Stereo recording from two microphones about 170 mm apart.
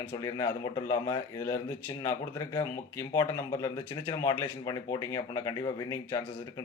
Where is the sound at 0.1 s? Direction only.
20° left (ahead or behind).